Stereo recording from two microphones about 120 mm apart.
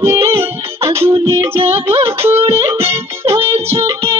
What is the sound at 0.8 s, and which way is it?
Music, 20° right (ahead or behind).